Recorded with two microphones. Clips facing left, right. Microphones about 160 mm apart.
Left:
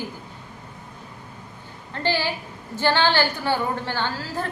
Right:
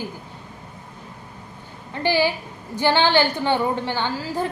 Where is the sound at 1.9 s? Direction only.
15° right (ahead or behind).